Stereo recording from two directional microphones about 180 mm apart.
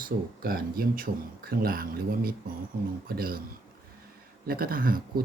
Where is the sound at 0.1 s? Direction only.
55° right (ahead or behind).